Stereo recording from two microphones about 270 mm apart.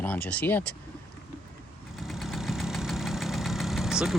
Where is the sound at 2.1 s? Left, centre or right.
Centre.